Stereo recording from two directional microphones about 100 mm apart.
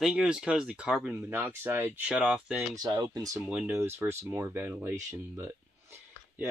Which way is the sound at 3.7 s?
25° right (ahead or behind).